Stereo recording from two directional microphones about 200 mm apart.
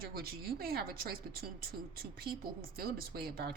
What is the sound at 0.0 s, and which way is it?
Speech, 50° right (ahead or behind).